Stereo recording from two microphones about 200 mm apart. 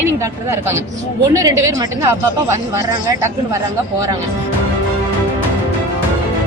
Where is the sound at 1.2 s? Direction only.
15° right (ahead or behind).